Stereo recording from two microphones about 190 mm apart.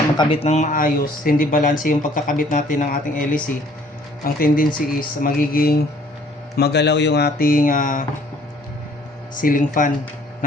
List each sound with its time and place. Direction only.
0.2 s speech: 30° left (ahead or behind); by 5.8 s 50° left (ahead or behind)
6.6 s speech: 60° left (ahead or behind); by 8.0 s 45° left (ahead or behind)
9.3 s speech: 45° left (ahead or behind)